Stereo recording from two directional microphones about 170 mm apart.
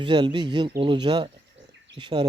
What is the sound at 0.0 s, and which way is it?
Speech, 25° right (ahead or behind).